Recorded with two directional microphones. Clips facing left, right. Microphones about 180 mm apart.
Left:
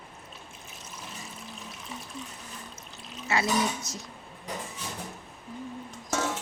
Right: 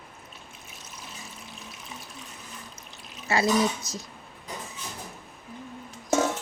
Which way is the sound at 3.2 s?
35° right (ahead or behind).